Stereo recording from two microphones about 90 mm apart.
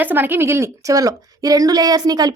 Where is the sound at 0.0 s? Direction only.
20° right (ahead or behind).